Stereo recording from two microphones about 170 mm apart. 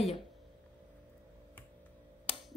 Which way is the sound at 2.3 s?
35° left (ahead or behind).